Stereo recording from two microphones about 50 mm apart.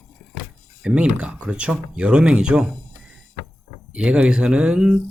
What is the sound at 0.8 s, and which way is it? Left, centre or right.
Speech, centre.